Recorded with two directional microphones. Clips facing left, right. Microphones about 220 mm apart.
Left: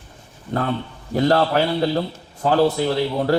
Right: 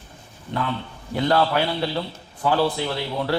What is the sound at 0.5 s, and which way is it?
A man's voice, 45° left (ahead or behind).